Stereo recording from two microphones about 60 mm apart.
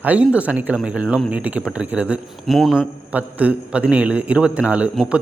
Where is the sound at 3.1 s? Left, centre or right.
Right.